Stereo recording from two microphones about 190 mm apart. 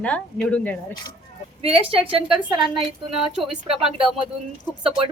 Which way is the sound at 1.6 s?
30° right (ahead or behind).